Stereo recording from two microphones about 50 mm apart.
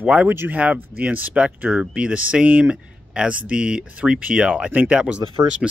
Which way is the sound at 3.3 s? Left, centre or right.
Right.